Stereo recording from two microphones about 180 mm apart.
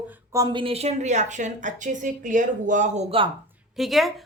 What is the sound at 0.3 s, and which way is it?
A woman's voice, 25° right (ahead or behind).